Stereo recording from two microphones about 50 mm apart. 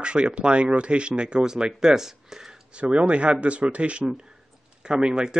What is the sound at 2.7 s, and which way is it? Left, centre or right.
Speech, right.